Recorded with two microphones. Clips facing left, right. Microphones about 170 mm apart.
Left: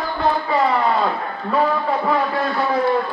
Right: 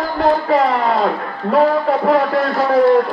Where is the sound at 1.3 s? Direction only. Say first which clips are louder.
Right 8 dB; 75° right (ahead or behind).